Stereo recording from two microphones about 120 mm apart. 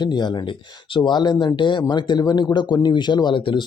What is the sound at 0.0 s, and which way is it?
Speech, 40° left (ahead or behind).